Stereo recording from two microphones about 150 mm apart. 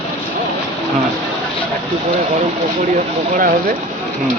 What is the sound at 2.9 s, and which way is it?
Speech, 65° right (ahead or behind).